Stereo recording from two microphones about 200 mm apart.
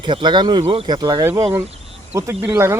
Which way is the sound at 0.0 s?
20° right (ahead or behind).